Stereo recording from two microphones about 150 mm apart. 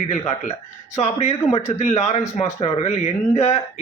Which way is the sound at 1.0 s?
45° left (ahead or behind).